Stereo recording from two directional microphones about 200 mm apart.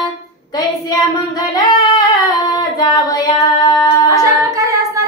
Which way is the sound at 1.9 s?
20° left (ahead or behind).